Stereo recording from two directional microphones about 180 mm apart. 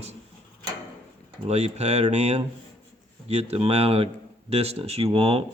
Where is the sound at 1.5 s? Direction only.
35° right (ahead or behind).